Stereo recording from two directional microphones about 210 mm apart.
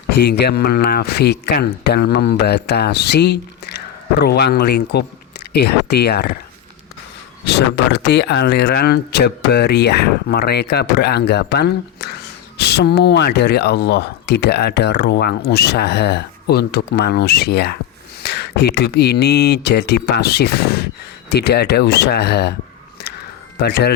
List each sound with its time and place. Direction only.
0.2 s speech: 50° left (ahead or behind)
7.4 s speech: 55° left (ahead or behind)
23.6 s speech: 50° left (ahead or behind)